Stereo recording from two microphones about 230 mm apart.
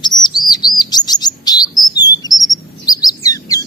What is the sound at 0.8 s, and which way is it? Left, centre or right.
Chirp, centre.